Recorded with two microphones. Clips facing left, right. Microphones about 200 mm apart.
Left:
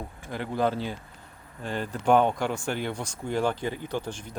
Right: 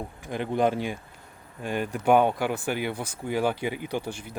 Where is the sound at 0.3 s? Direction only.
20° right (ahead or behind).